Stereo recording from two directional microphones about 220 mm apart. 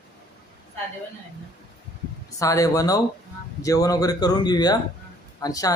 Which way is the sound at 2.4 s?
15° left (ahead or behind).